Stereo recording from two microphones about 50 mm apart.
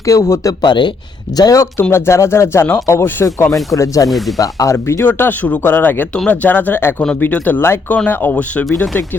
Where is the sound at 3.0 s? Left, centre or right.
Left.